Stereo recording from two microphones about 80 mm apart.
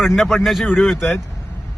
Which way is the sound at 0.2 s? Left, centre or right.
Centre.